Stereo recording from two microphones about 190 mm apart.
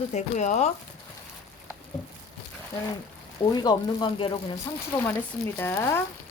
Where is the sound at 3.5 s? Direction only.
20° left (ahead or behind).